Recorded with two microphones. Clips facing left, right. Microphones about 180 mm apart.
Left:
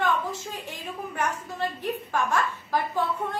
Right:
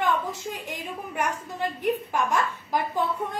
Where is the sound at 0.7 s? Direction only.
15° right (ahead or behind).